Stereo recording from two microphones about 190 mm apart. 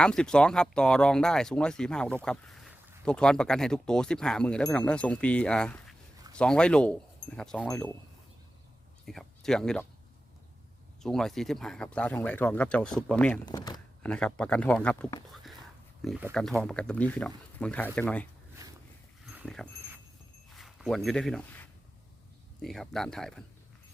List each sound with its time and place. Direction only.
0.0 s speech: 5° left (ahead or behind)
9.0 s speech: centre (ahead or behind)
11.0 s speech: centre (ahead or behind)
13.4 s speech: 20° left (ahead or behind)
14.0 s speech: 5° left (ahead or behind)
16.3 s speech: 5° left (ahead or behind)
18.6 s a sound: 20° right (ahead or behind)
19.2 s dog: 5° right (ahead or behind)
20.5 s speech: centre (ahead or behind)
22.6 s speech: centre (ahead or behind)